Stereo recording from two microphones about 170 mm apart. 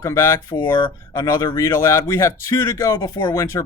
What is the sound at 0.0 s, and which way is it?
Speech, 15° left (ahead or behind).